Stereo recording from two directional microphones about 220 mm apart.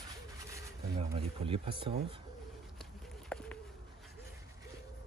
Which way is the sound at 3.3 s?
5° left (ahead or behind).